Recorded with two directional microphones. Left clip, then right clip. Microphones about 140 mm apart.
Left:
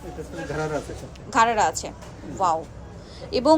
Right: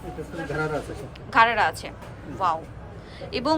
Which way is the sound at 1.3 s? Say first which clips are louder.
Even; 30° left (ahead or behind).